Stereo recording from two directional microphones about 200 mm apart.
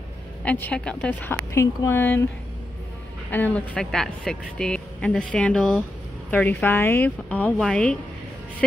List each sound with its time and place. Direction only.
0.4 s a woman's voice: 5° left (ahead or behind)
3.3 s a woman's voice: 10° left (ahead or behind)